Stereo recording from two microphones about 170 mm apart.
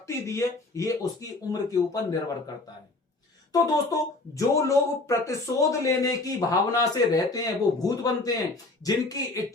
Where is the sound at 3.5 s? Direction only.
20° left (ahead or behind).